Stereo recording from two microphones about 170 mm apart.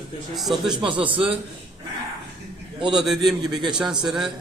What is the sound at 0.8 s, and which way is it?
Speech, 30° right (ahead or behind).